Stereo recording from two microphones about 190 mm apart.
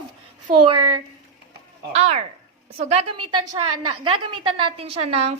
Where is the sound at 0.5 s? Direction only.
25° right (ahead or behind).